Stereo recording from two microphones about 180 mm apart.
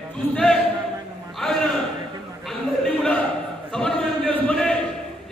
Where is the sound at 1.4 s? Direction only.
5° left (ahead or behind).